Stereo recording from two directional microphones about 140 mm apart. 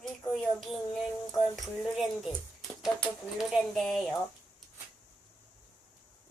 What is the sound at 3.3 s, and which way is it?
Speech, centre (ahead or behind).